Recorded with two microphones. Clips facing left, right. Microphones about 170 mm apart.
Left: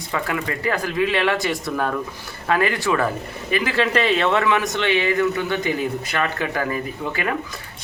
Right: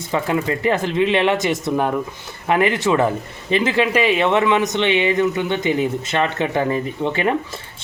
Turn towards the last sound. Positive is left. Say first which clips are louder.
# right 5 dB
turn(degrees=-25)  # may be behind; listen again after turning